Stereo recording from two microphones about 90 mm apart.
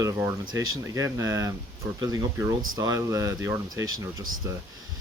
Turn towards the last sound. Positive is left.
turn(degrees=-35)  # may be behind; listen again after turning